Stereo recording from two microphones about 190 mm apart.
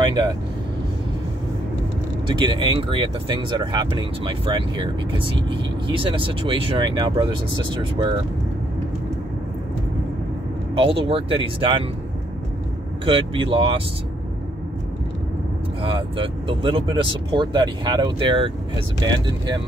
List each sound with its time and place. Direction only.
0.0 s speech: 20° right (ahead or behind)
2.2 s speech: 25° right (ahead or behind)
10.8 s speech: 30° right (ahead or behind)
13.0 s speech: 30° right (ahead or behind)
15.8 s speech: 25° right (ahead or behind)